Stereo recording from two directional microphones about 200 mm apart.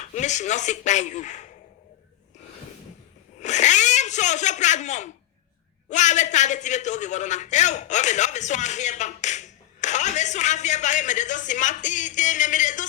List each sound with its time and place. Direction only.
0.0 s a man's voice: 35° left (ahead or behind)
3.4 s a sound: 35° left (ahead or behind)
5.9 s a man's voice: 35° left (ahead or behind)